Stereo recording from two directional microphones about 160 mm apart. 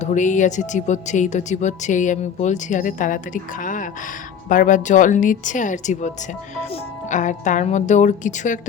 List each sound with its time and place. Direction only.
0.0 s speech: 50° left (ahead or behind)
7.1 s speech: 50° left (ahead or behind)